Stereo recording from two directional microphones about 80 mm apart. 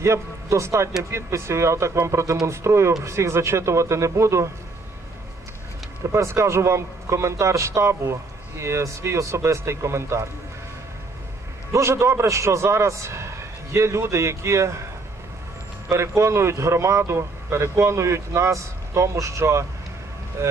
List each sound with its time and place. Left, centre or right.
0.0 s a man's voice: right
6.1 s a man's voice: right
11.7 s a man's voice: right
15.9 s a man's voice: right